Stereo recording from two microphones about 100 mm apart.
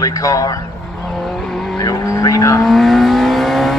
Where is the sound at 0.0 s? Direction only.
35° left (ahead or behind).